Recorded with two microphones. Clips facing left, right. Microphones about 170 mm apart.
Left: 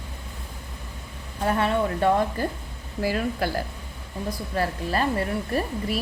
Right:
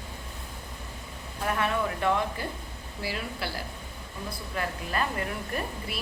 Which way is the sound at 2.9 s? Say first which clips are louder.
Left 9 dB; 45° left (ahead or behind).